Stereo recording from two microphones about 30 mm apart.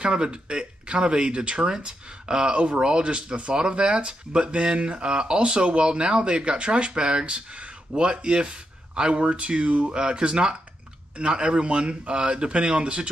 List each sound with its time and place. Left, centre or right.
0.0 s speech: right
1.7 s speech: right
4.9 s speech: right
7.3 s speech: right